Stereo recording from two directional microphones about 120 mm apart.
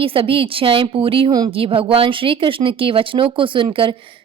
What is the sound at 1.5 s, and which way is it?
Speech, 50° right (ahead or behind).